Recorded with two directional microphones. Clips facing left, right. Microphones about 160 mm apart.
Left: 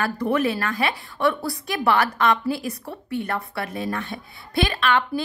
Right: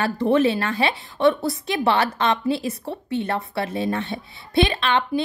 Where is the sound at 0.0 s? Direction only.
25° right (ahead or behind).